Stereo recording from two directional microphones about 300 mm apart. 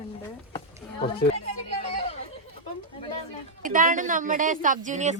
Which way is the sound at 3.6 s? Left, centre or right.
Right.